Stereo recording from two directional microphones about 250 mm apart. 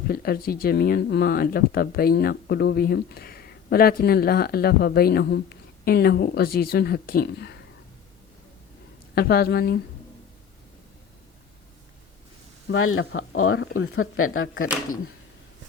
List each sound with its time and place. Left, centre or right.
0.1 s speech: left
9.1 s speech: left
12.6 s speech: left